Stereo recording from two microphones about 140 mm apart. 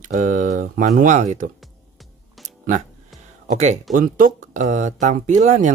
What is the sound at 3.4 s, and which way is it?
Speech, 55° right (ahead or behind).